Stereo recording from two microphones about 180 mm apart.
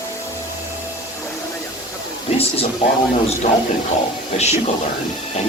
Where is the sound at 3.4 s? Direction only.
40° left (ahead or behind).